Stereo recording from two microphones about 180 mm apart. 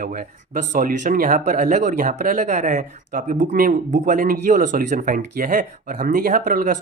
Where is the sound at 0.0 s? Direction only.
50° right (ahead or behind).